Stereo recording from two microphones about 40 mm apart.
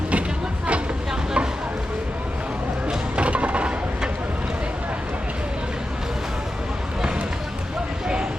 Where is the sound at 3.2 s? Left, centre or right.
Right.